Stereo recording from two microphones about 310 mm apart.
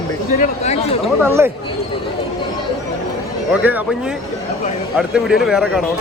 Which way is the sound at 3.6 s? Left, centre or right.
Centre.